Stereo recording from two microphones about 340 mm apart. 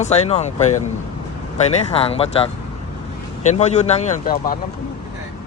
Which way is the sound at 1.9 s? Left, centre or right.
Centre.